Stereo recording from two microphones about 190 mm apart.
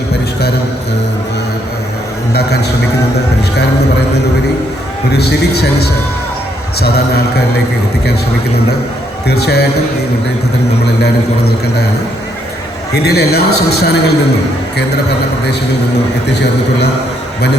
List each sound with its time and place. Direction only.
2.3 s a man's voice: 60° left (ahead or behind)
5.1 s a man's voice: 60° left (ahead or behind)
9.2 s a man's voice: 60° left (ahead or behind)
13.0 s a man's voice: 60° left (ahead or behind)
16.2 s a man's voice: 65° left (ahead or behind)